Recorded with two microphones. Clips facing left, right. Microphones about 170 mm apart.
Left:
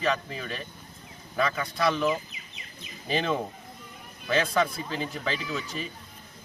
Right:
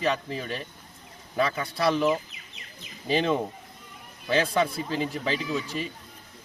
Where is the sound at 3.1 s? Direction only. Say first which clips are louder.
Right 3 dB; 30° right (ahead or behind).